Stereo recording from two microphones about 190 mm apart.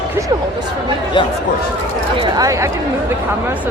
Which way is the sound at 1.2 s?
25° left (ahead or behind).